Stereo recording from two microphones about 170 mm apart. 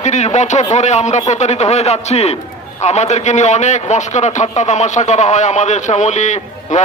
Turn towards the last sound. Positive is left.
turn(degrees=45)  # may be behind; listen again after turning